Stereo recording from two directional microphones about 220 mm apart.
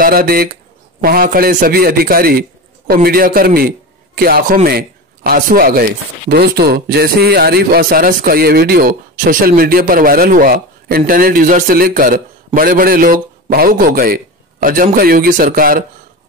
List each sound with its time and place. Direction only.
0.0 s a man's voice: 40° right (ahead or behind)